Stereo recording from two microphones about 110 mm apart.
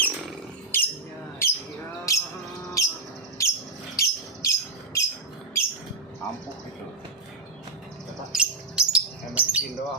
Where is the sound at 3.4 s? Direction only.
30° left (ahead or behind).